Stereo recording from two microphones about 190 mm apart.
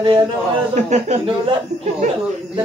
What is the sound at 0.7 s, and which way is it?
Speech, 35° right (ahead or behind).